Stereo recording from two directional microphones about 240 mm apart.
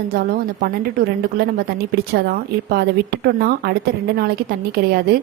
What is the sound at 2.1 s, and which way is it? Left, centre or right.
A woman's voice, right.